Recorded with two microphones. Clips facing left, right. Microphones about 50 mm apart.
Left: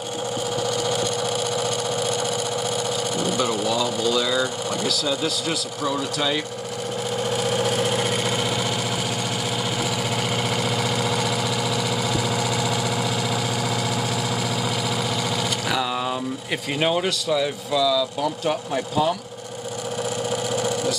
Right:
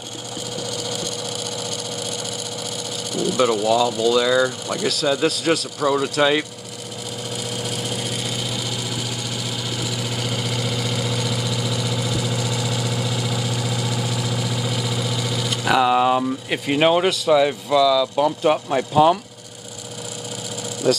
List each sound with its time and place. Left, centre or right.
3.3 s a man's voice: right
3.7 s a man's voice: right
7.4 s vehicle: left
10.3 s vehicle: left
10.9 s engine: centre
15.6 s vehicle: right
16.4 s speech: centre